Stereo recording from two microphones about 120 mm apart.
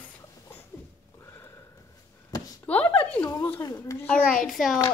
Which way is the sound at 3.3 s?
25° left (ahead or behind).